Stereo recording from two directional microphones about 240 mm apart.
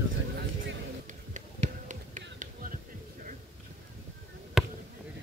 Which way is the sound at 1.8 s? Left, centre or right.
Right.